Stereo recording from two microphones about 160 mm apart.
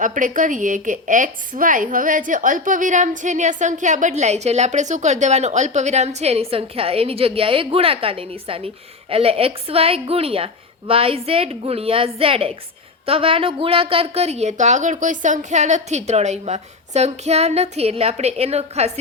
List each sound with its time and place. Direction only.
0.0 s a woman's voice: 55° right (ahead or behind)